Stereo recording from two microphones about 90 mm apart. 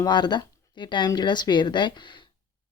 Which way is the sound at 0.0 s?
55° left (ahead or behind).